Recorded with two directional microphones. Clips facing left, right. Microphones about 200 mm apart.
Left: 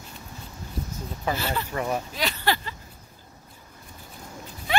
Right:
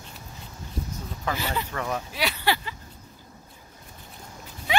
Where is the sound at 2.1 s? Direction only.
10° right (ahead or behind).